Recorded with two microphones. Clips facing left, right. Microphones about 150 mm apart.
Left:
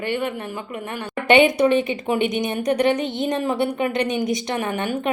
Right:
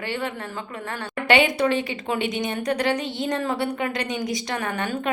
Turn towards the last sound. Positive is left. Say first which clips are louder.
# left 3 dB
turn(degrees=20)  # may be behind; listen again after turning